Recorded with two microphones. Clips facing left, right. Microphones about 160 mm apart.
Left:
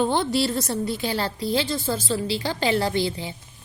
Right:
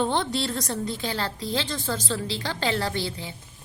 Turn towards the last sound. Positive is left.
turn(degrees=15)  # may be behind; listen again after turning